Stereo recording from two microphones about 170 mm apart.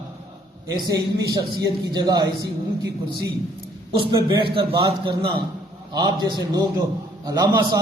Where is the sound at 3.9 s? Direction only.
30° right (ahead or behind).